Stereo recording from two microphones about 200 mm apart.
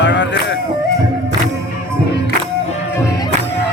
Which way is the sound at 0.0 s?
60° left (ahead or behind).